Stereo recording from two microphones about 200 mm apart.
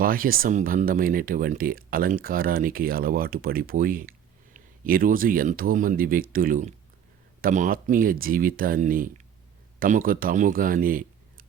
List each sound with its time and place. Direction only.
0.0 s a man's voice: 45° right (ahead or behind)